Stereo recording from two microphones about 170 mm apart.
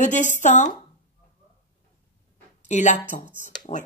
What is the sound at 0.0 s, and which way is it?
Speech, 45° left (ahead or behind).